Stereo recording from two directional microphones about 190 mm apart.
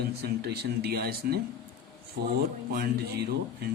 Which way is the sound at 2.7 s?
55° right (ahead or behind).